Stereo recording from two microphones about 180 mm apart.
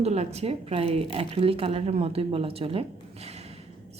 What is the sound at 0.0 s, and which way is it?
Speech, 35° right (ahead or behind).